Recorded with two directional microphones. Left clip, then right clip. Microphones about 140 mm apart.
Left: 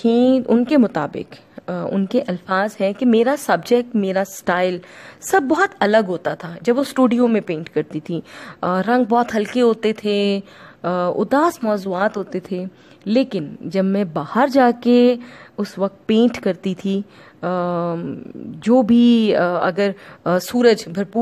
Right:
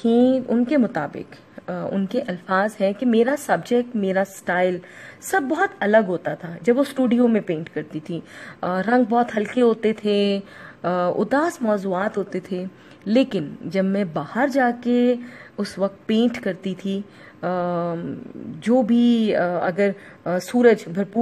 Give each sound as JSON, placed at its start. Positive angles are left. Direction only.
{"t": 0.0, "sound": "a woman's voice", "side_deg": 25}
{"t": 10.1, "sound": "speech", "side_deg": 20}
{"t": 11.4, "sound": "a woman's voice", "side_deg": 30}
{"t": 15.5, "sound": "a woman's voice", "side_deg": 20}